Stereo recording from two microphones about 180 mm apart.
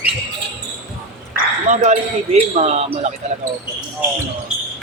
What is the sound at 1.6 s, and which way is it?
A man's voice, 40° right (ahead or behind).